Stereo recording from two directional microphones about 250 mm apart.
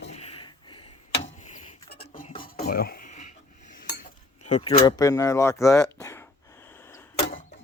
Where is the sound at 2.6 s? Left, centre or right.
Left.